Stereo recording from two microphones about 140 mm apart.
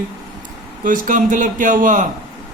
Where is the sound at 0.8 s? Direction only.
75° right (ahead or behind).